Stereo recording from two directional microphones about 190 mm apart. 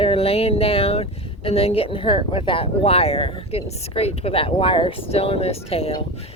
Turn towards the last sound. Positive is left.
turn(degrees=30)  # may be behind; listen again after turning